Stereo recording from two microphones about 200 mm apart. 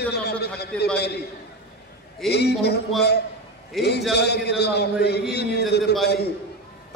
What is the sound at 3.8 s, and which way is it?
A man's voice, 55° left (ahead or behind).